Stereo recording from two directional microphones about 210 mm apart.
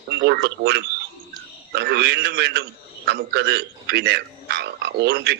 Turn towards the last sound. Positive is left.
turn(degrees=-50)  # may be behind; listen again after turning